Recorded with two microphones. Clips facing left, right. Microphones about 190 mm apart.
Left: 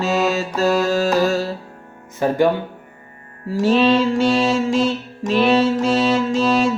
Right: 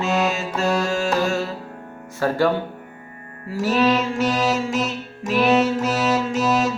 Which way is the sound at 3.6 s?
25° left (ahead or behind).